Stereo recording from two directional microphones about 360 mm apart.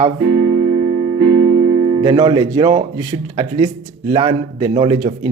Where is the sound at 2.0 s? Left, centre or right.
Centre.